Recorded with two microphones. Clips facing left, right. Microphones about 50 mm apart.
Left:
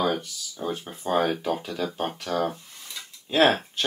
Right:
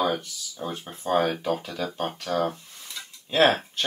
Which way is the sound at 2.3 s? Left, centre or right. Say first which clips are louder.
Right 1 dB; centre.